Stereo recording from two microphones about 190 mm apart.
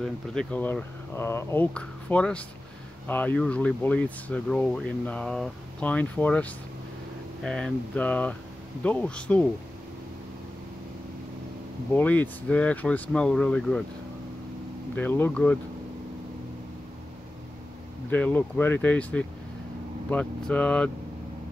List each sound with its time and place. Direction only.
0.0 s speech: 5° left (ahead or behind)
11.9 s speech: 10° left (ahead or behind)
15.0 s speech: 10° left (ahead or behind)
18.1 s speech: 10° left (ahead or behind)